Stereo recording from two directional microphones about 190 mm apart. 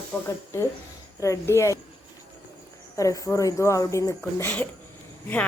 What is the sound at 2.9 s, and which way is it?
Speech, 15° left (ahead or behind).